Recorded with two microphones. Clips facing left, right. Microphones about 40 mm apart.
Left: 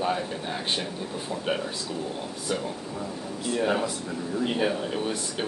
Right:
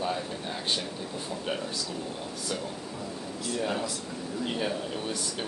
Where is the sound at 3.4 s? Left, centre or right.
Left.